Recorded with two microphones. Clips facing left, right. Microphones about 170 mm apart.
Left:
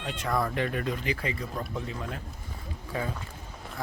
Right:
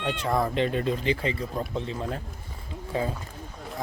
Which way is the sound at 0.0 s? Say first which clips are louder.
Right 4 dB; 30° right (ahead or behind).